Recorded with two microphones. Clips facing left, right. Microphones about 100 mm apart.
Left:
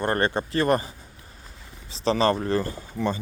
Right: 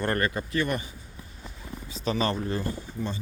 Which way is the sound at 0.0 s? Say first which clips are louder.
Left 3 dB; 30° left (ahead or behind).